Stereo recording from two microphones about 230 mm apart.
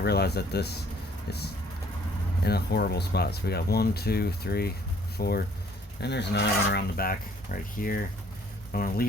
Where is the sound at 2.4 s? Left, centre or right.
Left.